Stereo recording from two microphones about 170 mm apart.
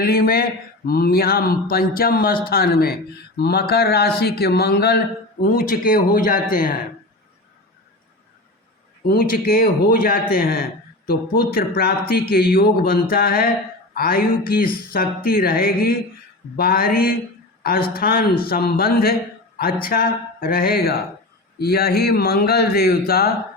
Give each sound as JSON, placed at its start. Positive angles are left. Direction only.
{"t": 0.0, "sound": "speech", "side_deg": 60}
{"t": 9.0, "sound": "a woman's voice", "side_deg": 60}